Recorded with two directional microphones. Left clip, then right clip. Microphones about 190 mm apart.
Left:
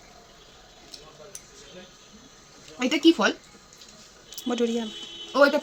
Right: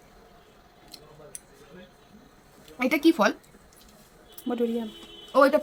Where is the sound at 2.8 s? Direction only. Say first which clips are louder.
Left 1 dB; 15° right (ahead or behind).